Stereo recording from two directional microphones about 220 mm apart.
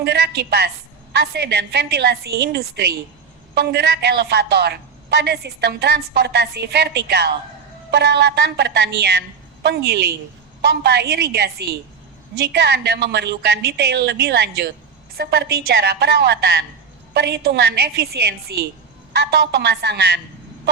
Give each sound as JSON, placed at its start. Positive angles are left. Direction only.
{"t": 0.0, "sound": "a woman's voice", "side_deg": -50}